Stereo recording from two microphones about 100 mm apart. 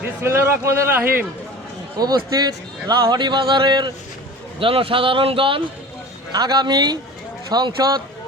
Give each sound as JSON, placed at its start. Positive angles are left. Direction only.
{"t": 0.2, "sound": "a man's voice", "side_deg": -25}
{"t": 2.0, "sound": "a man's voice", "side_deg": -40}
{"t": 4.6, "sound": "speech", "side_deg": -65}
{"t": 6.3, "sound": "a man's voice", "side_deg": -45}